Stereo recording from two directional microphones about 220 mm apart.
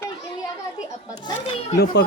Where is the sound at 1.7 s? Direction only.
50° left (ahead or behind).